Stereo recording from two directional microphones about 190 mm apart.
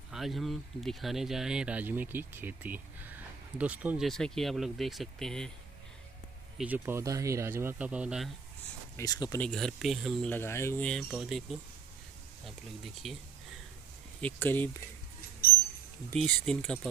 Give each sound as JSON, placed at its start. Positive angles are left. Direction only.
{"t": 0.1, "sound": "speech", "side_deg": 0}
{"t": 6.6, "sound": "speech", "side_deg": -10}
{"t": 8.9, "sound": "speech", "side_deg": 20}
{"t": 9.4, "sound": "speech", "side_deg": 0}
{"t": 10.3, "sound": "speech", "side_deg": 15}
{"t": 13.0, "sound": "speech", "side_deg": 0}
{"t": 14.2, "sound": "speech", "side_deg": 10}
{"t": 16.1, "sound": "speech", "side_deg": 5}